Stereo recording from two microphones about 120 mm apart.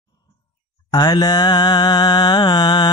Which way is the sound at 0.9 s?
35° left (ahead or behind).